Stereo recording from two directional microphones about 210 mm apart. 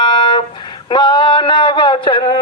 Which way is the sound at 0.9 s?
20° left (ahead or behind).